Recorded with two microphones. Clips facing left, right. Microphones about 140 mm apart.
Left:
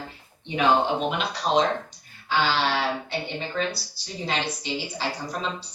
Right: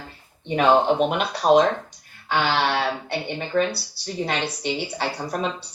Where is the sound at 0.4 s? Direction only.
55° right (ahead or behind).